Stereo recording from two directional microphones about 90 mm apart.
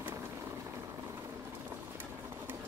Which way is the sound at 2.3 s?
25° right (ahead or behind).